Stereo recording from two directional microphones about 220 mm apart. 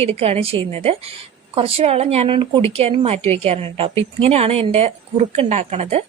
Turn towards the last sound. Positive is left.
turn(degrees=-30)  # may be behind; listen again after turning